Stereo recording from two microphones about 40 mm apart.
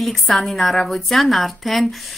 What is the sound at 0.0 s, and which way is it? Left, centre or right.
Speech, centre.